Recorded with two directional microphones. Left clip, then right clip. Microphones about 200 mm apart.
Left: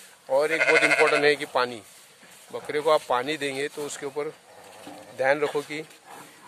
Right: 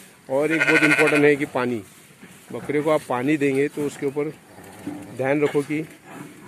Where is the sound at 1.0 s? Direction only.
5° left (ahead or behind).